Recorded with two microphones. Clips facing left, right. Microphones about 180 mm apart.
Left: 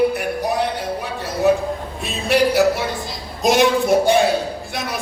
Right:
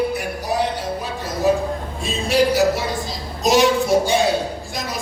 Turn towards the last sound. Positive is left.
turn(degrees=55)  # may be behind; listen again after turning